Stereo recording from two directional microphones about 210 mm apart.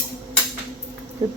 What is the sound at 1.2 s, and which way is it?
Speech, 25° right (ahead or behind).